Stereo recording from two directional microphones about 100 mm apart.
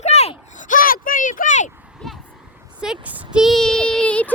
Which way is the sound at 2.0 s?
Centre (ahead or behind).